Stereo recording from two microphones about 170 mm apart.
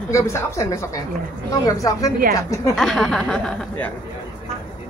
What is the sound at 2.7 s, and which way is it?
Speech, centre (ahead or behind).